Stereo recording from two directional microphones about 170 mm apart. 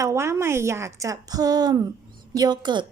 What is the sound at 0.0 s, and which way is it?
A woman's voice, 15° right (ahead or behind).